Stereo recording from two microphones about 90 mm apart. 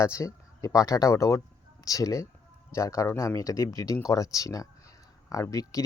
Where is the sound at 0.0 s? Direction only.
35° left (ahead or behind).